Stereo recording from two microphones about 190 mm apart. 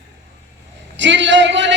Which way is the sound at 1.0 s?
75° right (ahead or behind).